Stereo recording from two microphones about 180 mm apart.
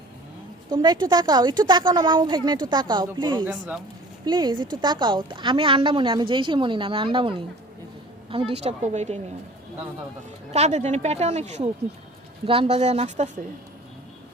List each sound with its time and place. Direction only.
0.7 s a woman's voice: 25° right (ahead or behind)
3.4 s speech: 10° right (ahead or behind)
4.3 s a woman's voice: 25° right (ahead or behind); by 9.1 s 40° right (ahead or behind)
10.5 s speech: 35° right (ahead or behind)